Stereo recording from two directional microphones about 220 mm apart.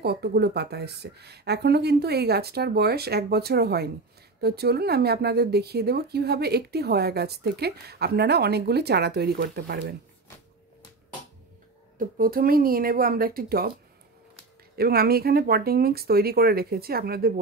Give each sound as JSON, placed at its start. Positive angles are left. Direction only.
{"t": 0.0, "sound": "speech", "side_deg": -45}
{"t": 12.0, "sound": "speech", "side_deg": -40}
{"t": 14.8, "sound": "speech", "side_deg": -45}